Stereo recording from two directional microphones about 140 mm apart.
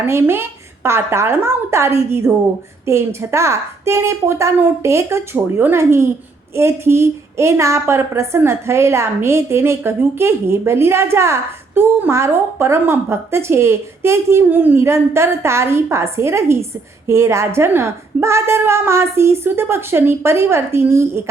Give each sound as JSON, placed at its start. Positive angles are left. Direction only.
{"t": 0.0, "sound": "a woman's voice", "side_deg": -15}